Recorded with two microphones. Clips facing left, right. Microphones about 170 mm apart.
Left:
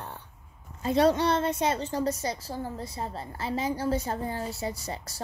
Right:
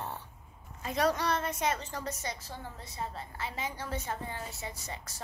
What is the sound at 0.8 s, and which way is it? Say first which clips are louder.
A woman's voice: left 7 dB; 30° left (ahead or behind).